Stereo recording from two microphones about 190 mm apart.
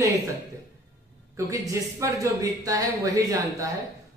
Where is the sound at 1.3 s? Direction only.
15° right (ahead or behind).